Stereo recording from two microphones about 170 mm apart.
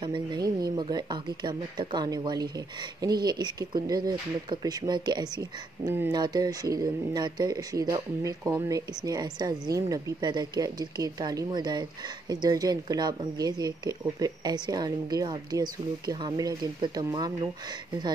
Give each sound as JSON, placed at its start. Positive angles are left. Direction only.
{"t": 0.0, "sound": "speech", "side_deg": -25}